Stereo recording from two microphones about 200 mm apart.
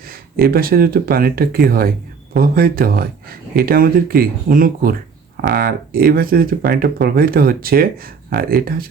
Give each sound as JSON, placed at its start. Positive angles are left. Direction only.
{"t": 0.1, "sound": "speech", "side_deg": -50}